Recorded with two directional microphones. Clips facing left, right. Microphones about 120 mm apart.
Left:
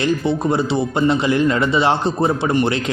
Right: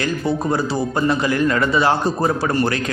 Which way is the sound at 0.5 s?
25° left (ahead or behind).